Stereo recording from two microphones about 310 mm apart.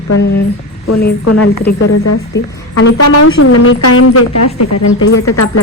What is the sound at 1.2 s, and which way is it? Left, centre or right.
Speech, left.